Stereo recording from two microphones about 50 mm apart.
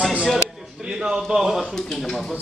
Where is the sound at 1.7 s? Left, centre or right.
Centre.